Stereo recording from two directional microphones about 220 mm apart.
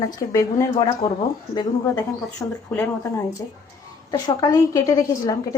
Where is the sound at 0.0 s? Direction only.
15° left (ahead or behind).